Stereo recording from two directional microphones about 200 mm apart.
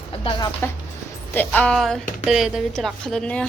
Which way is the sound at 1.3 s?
10° left (ahead or behind).